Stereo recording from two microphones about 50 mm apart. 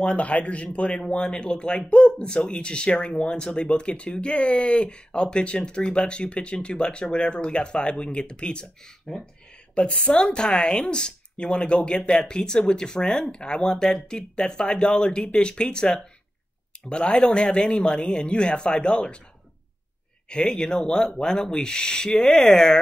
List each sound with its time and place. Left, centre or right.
0.0 s speech: left
9.8 s speech: left
20.2 s speech: centre